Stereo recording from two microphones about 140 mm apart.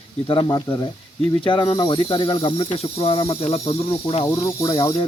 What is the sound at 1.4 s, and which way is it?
Speech, 35° left (ahead or behind).